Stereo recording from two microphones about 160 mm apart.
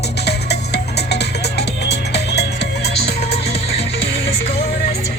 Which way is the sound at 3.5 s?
40° left (ahead or behind).